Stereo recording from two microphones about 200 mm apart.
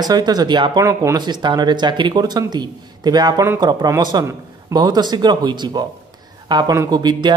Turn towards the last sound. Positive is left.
turn(degrees=-20)  # may be behind; listen again after turning